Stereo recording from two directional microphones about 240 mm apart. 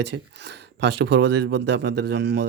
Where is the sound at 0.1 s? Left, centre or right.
Right.